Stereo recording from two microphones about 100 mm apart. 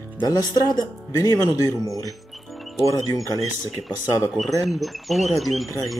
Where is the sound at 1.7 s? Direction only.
35° right (ahead or behind).